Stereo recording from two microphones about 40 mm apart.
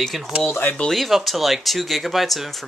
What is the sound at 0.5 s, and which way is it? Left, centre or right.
Speech, left.